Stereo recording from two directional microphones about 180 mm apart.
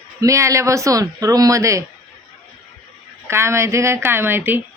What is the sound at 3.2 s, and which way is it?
Speech, 15° right (ahead or behind).